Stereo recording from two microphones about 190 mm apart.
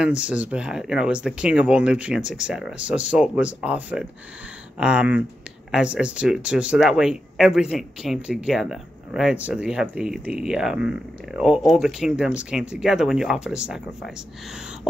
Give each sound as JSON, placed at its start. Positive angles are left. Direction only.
{"t": 0.0, "sound": "speech", "side_deg": -5}